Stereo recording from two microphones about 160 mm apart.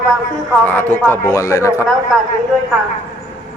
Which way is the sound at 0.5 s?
10° left (ahead or behind).